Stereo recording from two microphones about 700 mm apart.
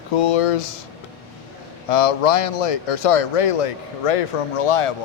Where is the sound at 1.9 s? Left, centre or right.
Left.